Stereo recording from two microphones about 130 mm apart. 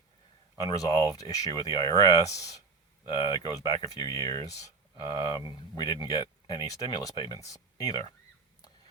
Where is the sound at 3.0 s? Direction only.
40° left (ahead or behind).